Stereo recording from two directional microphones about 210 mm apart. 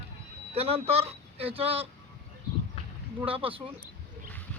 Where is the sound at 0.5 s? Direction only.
30° right (ahead or behind).